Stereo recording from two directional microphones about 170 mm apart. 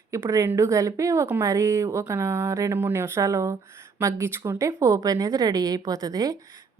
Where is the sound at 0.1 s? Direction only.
20° right (ahead or behind).